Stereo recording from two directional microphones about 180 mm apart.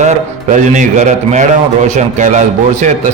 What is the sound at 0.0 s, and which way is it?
Speech, 40° right (ahead or behind).